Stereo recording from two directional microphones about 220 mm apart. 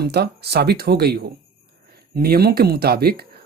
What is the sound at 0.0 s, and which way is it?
Speech, 45° right (ahead or behind).